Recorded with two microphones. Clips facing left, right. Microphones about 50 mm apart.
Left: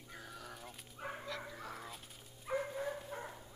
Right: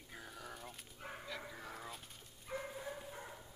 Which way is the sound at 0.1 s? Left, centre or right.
Centre.